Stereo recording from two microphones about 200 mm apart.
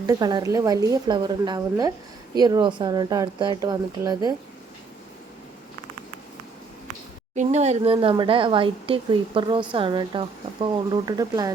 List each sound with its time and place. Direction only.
0.0 s a woman's voice: 20° right (ahead or behind)
7.3 s speech: 35° right (ahead or behind)
7.9 s a woman's voice: 20° right (ahead or behind)